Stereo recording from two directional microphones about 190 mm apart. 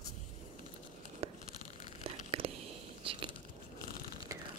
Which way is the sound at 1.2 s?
30° right (ahead or behind).